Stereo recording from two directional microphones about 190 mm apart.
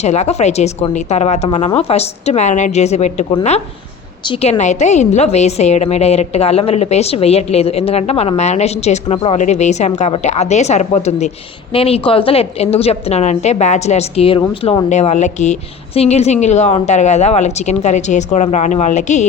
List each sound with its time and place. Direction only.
0.0 s a woman's voice: 35° left (ahead or behind)